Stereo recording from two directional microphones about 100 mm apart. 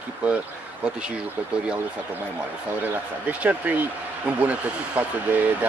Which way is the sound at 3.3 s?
15° right (ahead or behind).